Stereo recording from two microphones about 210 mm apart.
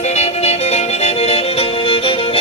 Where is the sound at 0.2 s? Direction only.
30° left (ahead or behind).